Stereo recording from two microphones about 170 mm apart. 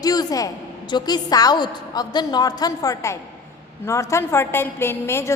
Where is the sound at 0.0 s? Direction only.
20° left (ahead or behind).